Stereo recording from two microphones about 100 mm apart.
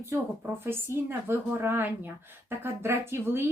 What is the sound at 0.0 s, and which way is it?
Speech, 25° right (ahead or behind).